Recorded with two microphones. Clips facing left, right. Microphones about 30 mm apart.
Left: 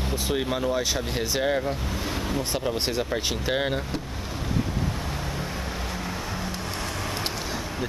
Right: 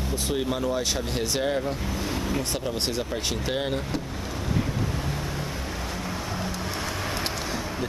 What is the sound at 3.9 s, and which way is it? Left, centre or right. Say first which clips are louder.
Vehicle: right 1 dB; centre.